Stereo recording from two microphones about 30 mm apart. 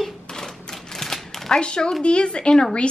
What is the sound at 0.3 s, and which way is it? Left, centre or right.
Typewriter, left.